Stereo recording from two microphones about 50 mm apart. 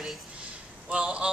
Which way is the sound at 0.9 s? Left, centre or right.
Right.